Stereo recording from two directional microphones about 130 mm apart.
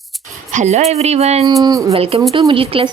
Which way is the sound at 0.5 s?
60° right (ahead or behind).